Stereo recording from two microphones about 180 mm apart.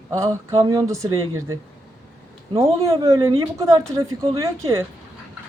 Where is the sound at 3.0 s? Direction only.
20° right (ahead or behind).